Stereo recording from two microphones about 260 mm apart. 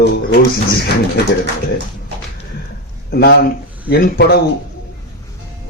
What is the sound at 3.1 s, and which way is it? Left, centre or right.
Speech, left.